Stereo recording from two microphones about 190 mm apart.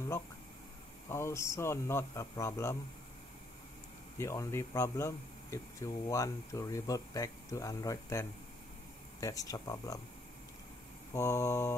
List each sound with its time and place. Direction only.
1.0 s speech: 15° left (ahead or behind)
4.2 s speech: 15° left (ahead or behind)
11.1 s speech: 15° left (ahead or behind)